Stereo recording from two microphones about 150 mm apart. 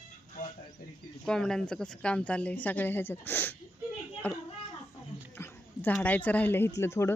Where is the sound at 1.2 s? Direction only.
5° left (ahead or behind).